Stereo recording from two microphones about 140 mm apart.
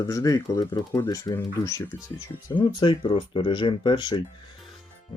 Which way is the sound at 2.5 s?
30° left (ahead or behind).